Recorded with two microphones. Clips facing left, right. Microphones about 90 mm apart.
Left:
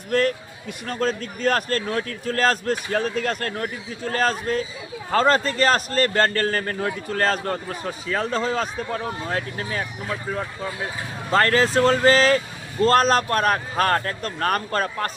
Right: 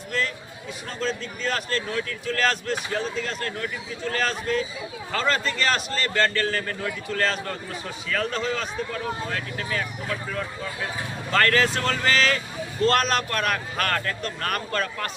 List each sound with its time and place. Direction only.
0.1 s a man's voice: 50° left (ahead or behind)
2.9 s a man's voice: 50° left (ahead or behind); by 15.1 s 35° left (ahead or behind)